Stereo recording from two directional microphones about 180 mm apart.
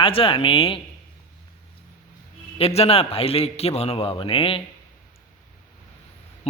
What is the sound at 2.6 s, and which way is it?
A man's voice, 35° left (ahead or behind).